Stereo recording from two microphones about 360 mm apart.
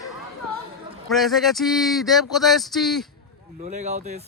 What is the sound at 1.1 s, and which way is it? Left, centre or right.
Speech, centre.